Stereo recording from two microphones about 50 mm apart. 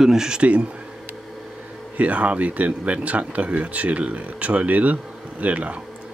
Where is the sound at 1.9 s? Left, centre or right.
Right.